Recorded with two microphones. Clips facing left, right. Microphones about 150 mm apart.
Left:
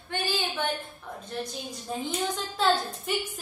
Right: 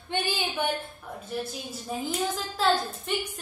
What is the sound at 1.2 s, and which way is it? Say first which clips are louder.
A woman's voice: right 1 dB; 5° right (ahead or behind).